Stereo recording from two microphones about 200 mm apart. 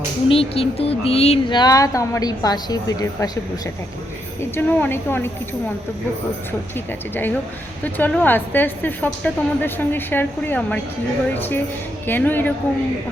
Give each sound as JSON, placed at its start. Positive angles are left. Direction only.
{"t": 0.3, "sound": "speech", "side_deg": 30}
{"t": 4.5, "sound": "a woman's voice", "side_deg": 10}
{"t": 7.9, "sound": "a woman's voice", "side_deg": 10}